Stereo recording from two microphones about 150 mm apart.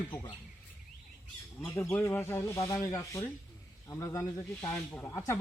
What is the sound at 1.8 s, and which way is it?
Speech, 15° left (ahead or behind).